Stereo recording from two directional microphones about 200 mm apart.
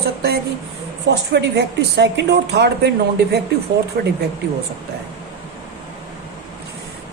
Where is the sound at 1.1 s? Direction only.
60° right (ahead or behind).